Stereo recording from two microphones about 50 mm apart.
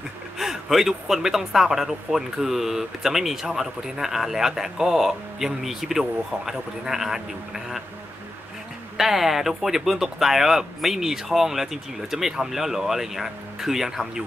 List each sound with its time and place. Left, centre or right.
0.4 s speech: centre
8.9 s speech: centre